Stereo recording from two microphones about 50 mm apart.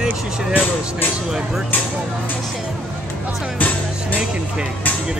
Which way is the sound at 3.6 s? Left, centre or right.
Left.